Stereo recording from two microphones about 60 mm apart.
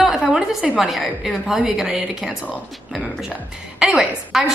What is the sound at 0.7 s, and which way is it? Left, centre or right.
Speech, centre.